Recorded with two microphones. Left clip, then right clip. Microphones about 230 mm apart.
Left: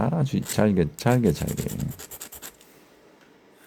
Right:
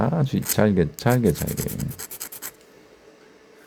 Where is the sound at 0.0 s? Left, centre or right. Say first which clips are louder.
Right 3 dB; centre.